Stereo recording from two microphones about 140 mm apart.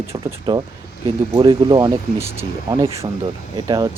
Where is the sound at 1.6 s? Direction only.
35° right (ahead or behind).